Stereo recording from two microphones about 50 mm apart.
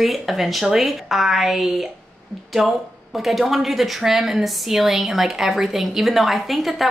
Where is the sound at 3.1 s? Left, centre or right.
Centre.